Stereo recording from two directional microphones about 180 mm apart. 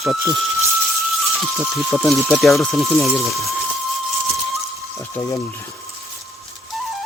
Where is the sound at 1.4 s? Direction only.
Centre (ahead or behind).